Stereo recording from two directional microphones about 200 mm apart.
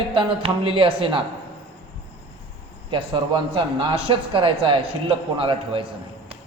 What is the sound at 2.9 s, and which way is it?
Speech, 25° right (ahead or behind).